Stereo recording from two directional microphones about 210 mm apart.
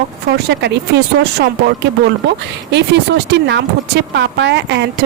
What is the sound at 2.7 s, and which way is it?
Speech, 55° right (ahead or behind).